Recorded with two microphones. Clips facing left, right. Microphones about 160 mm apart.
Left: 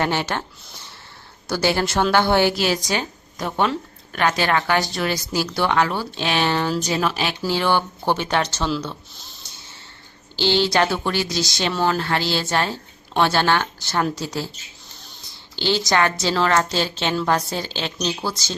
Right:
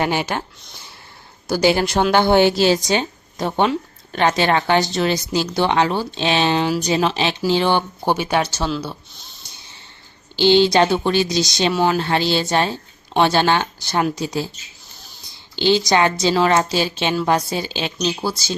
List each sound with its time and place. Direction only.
0.0 s a woman's voice: 15° right (ahead or behind)
1.5 s a woman's voice: 15° right (ahead or behind)
10.3 s speech: 15° right (ahead or behind)
15.5 s a woman's voice: 15° right (ahead or behind)